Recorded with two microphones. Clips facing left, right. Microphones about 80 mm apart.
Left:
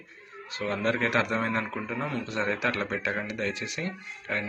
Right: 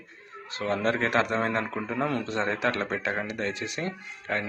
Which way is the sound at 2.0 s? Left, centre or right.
Right.